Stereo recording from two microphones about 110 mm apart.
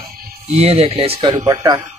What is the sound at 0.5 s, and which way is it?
Speech, 70° right (ahead or behind).